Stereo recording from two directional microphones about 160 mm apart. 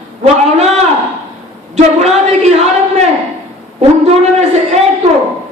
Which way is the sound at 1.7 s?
45° right (ahead or behind).